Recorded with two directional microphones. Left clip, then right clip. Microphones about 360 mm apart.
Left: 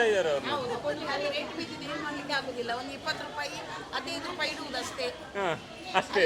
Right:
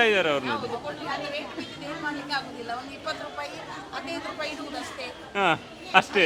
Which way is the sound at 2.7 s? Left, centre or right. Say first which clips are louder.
Right 1 dB; left.